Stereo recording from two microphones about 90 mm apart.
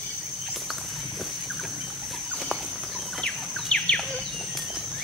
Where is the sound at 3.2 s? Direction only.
10° left (ahead or behind).